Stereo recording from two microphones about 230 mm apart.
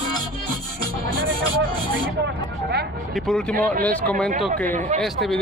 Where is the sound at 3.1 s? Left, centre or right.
Centre.